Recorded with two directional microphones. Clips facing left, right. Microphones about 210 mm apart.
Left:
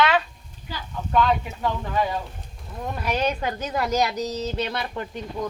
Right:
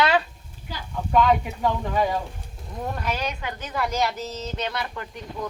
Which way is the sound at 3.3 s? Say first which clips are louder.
Left 5 dB; 40° left (ahead or behind).